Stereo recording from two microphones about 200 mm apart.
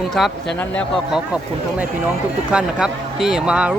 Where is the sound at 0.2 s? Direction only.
Centre (ahead or behind).